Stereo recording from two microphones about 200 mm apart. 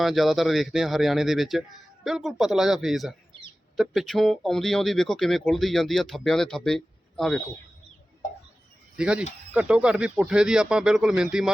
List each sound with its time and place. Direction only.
0.0 s speech: centre (ahead or behind)
9.0 s speech: 5° right (ahead or behind)